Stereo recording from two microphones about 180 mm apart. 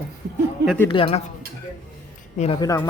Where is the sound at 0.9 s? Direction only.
30° left (ahead or behind).